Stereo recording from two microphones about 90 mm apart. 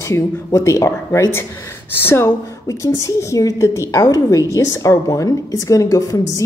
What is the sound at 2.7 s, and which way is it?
A woman's voice, 35° left (ahead or behind).